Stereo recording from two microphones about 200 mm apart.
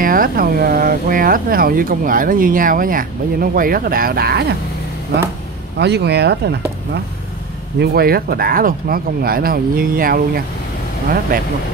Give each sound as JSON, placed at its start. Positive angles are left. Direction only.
{"t": 0.0, "sound": "speech", "side_deg": -45}
{"t": 5.8, "sound": "speech", "side_deg": -55}